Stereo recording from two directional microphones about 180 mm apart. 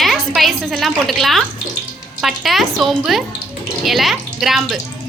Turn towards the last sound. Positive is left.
turn(degrees=0)  # may be behind; listen again after turning